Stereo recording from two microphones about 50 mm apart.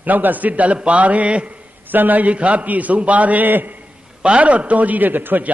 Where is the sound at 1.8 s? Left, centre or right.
Right.